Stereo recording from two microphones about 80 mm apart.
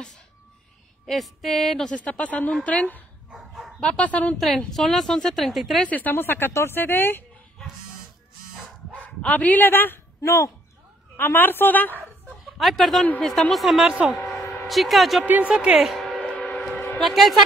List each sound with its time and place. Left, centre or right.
1.0 s a woman's voice: centre
2.0 s speech: centre
3.3 s bow-wow: centre
3.8 s speech: centre
4.4 s a woman's voice: centre
5.9 s speech: left
9.0 s speech: centre
10.2 s speech: left
11.1 s speech: left
12.5 s a woman's voice: centre
15.2 s speech: right
15.9 s a sound: centre
16.2 s music: centre
16.9 s a woman's voice: centre